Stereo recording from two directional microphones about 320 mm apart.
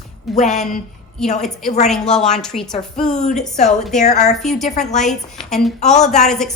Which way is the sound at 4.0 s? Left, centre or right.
Left.